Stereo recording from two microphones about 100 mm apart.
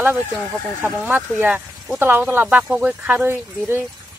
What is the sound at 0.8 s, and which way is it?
Speech, 15° right (ahead or behind).